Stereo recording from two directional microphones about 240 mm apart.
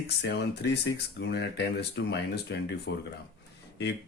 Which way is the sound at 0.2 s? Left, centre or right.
Left.